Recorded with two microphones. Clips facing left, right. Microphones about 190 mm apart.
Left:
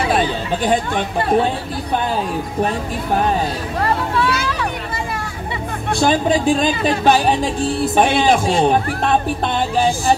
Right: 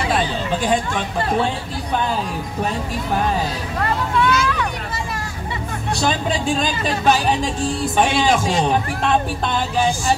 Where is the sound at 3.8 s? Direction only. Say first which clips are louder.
Left 1 dB; 35° left (ahead or behind).